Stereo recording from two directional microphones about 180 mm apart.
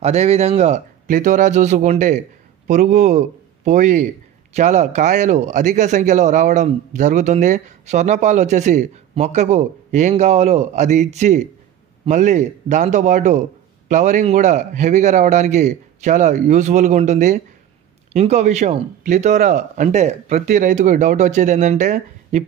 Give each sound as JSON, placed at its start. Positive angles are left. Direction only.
{"t": 0.0, "sound": "a man's voice", "side_deg": -35}